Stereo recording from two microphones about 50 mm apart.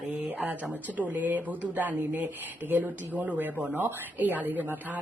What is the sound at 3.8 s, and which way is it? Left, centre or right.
Speech, right.